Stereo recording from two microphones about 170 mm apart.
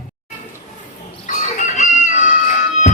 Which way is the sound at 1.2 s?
45° left (ahead or behind).